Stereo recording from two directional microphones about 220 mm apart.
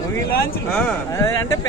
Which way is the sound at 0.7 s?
10° left (ahead or behind).